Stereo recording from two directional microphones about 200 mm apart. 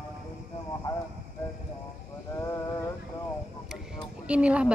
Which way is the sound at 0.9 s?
15° left (ahead or behind).